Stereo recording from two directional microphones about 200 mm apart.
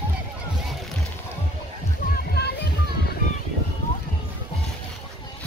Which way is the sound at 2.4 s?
50° left (ahead or behind).